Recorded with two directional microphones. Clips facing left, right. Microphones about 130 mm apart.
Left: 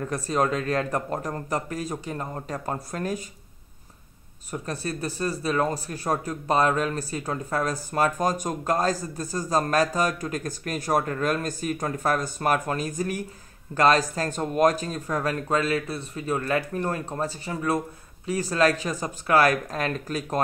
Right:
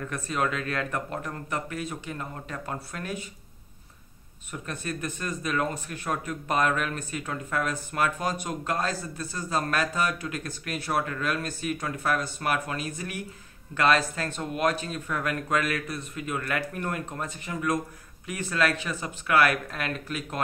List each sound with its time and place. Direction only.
0.0 s speech: 35° left (ahead or behind)
4.5 s speech: 35° left (ahead or behind)